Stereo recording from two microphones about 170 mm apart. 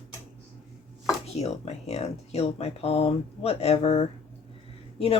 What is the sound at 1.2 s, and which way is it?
Speech, 40° left (ahead or behind).